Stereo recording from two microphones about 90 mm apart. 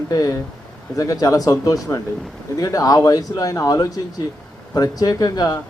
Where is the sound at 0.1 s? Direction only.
45° left (ahead or behind).